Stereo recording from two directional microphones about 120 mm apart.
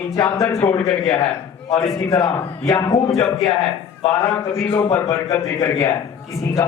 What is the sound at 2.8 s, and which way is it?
Speech, 30° left (ahead or behind).